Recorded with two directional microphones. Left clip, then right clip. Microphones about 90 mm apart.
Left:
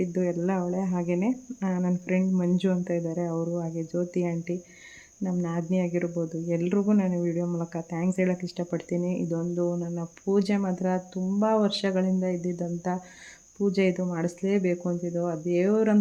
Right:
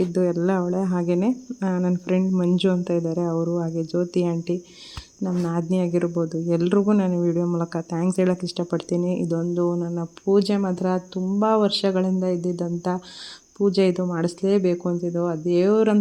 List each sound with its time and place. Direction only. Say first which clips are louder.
0.1 s speech: right 6 dB; 30° right (ahead or behind)
9.4 s speech: right 5 dB; 15° right (ahead or behind)